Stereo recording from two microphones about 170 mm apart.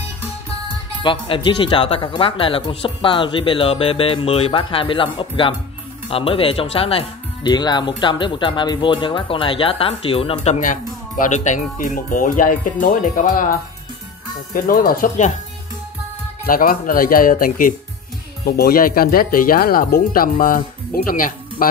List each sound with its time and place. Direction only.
1.0 s speech: 30° left (ahead or behind); by 15.3 s 50° left (ahead or behind)
16.4 s speech: 55° left (ahead or behind)